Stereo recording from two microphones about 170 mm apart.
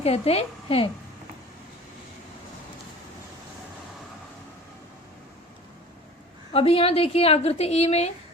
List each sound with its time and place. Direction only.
0.0 s a woman's voice: 35° left (ahead or behind)
6.5 s a woman's voice: 35° left (ahead or behind)